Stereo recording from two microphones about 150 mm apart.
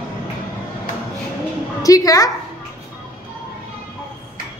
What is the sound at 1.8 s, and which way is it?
Speech, 25° left (ahead or behind).